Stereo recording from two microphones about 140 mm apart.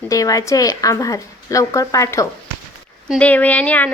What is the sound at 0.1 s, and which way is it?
A woman's voice, 25° left (ahead or behind).